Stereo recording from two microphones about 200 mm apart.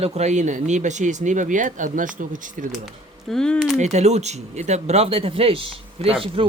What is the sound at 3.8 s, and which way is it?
Speech, 35° right (ahead or behind).